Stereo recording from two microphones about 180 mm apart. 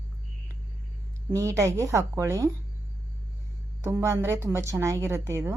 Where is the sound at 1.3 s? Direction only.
15° right (ahead or behind).